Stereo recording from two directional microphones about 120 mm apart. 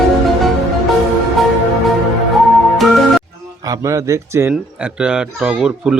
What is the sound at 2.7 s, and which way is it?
Music, centre (ahead or behind).